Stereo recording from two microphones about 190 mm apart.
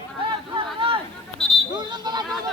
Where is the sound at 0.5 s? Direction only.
30° right (ahead or behind).